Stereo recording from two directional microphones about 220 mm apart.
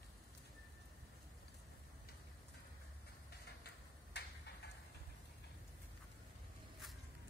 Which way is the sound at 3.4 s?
50° left (ahead or behind).